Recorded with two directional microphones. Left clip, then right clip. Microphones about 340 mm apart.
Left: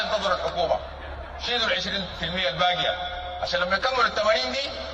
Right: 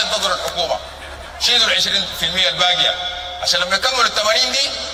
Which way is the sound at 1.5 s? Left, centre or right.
Centre.